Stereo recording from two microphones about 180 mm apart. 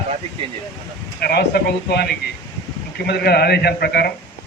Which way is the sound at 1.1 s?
60° left (ahead or behind).